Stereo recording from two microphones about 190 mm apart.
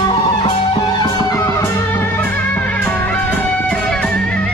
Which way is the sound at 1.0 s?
20° left (ahead or behind).